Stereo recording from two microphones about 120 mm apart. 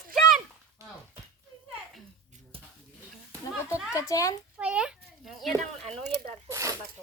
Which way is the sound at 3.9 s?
25° left (ahead or behind).